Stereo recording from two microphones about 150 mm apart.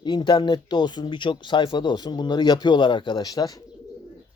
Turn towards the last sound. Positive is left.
turn(degrees=25)  # may be behind; listen again after turning